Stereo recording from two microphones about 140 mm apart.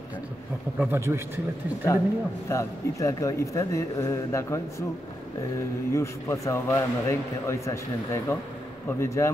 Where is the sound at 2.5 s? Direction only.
25° left (ahead or behind).